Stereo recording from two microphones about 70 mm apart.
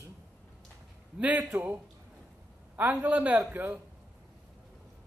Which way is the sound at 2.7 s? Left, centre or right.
Right.